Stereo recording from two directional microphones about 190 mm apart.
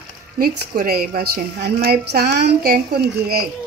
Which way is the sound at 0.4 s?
50° right (ahead or behind).